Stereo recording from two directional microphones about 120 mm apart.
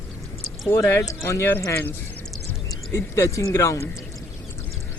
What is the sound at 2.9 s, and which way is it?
Speech, 25° left (ahead or behind).